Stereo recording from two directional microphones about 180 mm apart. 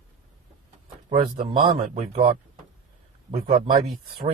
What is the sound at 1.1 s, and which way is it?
Speech, 35° right (ahead or behind).